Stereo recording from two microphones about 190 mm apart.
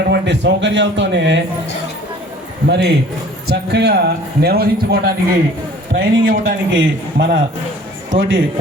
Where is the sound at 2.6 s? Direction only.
65° right (ahead or behind).